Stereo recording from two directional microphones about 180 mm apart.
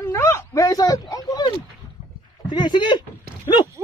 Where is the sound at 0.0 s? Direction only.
15° left (ahead or behind).